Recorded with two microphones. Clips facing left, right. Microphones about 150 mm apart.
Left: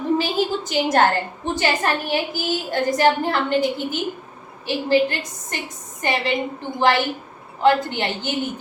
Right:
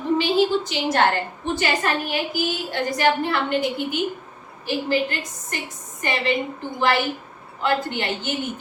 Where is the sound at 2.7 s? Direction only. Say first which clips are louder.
Left 4 dB; 40° left (ahead or behind).